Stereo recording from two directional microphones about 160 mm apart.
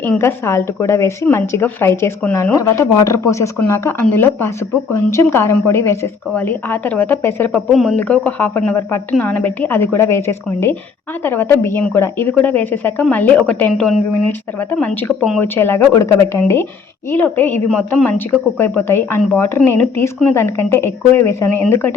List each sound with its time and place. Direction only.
0.0 s a woman's voice: 15° left (ahead or behind)
7.7 s a woman's voice: centre (ahead or behind)